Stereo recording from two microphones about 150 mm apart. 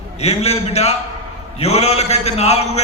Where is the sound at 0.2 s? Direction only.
45° left (ahead or behind).